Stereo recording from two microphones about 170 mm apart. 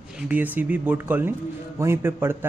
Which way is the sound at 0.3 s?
10° right (ahead or behind).